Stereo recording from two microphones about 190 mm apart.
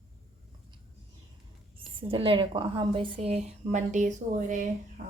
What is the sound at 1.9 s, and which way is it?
A woman's voice, 30° right (ahead or behind).